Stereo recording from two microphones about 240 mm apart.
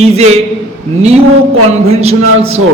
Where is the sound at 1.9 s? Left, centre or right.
Right.